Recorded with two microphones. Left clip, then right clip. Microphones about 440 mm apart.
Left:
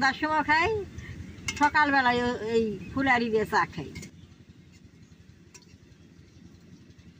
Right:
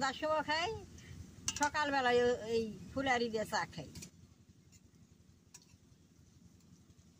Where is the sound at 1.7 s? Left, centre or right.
Right.